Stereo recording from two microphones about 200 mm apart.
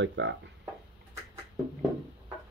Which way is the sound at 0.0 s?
65° right (ahead or behind).